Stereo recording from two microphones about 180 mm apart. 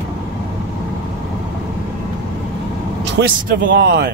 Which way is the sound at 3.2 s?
75° right (ahead or behind).